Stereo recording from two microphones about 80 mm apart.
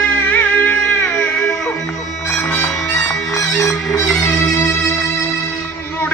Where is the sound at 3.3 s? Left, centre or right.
Left.